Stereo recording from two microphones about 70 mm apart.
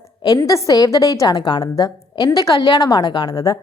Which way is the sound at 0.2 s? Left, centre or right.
Left.